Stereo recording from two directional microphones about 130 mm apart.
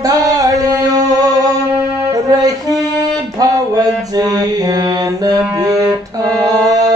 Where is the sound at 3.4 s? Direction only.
30° right (ahead or behind).